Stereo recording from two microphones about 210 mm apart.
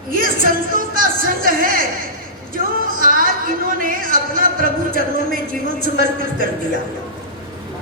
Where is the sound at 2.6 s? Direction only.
40° right (ahead or behind).